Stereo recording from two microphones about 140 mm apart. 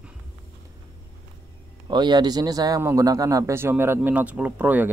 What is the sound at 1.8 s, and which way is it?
Speech, 30° right (ahead or behind).